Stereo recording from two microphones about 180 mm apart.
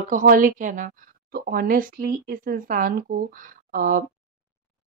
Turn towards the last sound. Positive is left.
turn(degrees=-50)  # may be behind; listen again after turning